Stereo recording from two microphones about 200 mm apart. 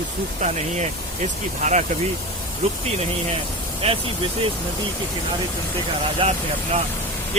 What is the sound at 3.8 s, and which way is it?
Speech, 30° right (ahead or behind).